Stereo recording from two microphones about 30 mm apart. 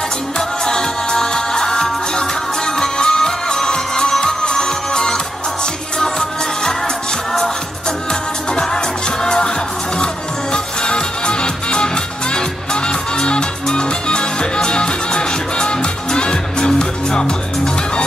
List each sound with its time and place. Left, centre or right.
0.7 s music: left
8.1 s music: left
10.5 s music: left